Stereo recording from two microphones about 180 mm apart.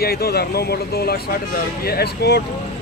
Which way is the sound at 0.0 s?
60° left (ahead or behind).